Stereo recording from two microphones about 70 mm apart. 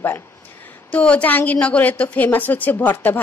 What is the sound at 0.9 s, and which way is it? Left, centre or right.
A woman's voice, centre.